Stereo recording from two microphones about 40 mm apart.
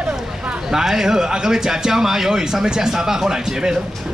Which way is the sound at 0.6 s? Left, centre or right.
Centre.